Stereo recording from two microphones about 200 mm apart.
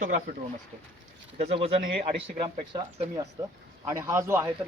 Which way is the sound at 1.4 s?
30° right (ahead or behind).